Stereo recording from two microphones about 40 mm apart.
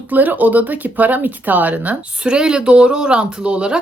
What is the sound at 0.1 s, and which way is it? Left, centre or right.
Speech, right.